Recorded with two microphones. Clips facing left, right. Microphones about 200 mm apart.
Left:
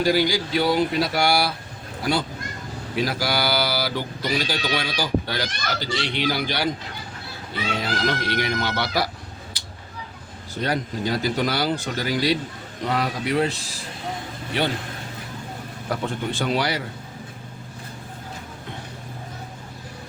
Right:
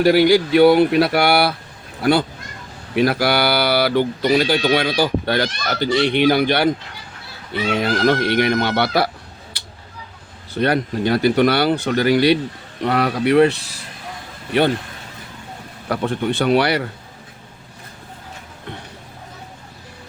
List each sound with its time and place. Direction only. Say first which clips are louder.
0.0 s speech: right 8 dB; 60° right (ahead or behind)
2.9 s speech: right 7 dB; 60° right (ahead or behind)
7.8 s speech: right 9 dB; 55° right (ahead or behind)
9.5 s a sound: right 1 dB; 60° right (ahead or behind)
10.6 s speech: right 7 dB; 65° right (ahead or behind)
15.9 s speech: right 6 dB; 65° right (ahead or behind)